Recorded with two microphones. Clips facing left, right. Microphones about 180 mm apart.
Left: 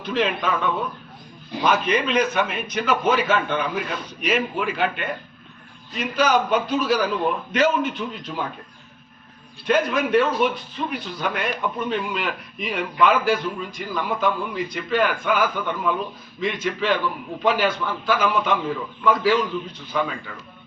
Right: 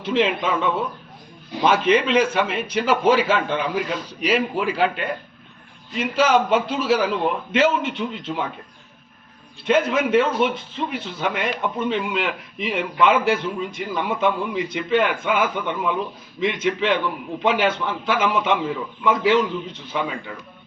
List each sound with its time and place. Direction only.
0.0 s a man's voice: 25° right (ahead or behind)
9.6 s a man's voice: 25° right (ahead or behind)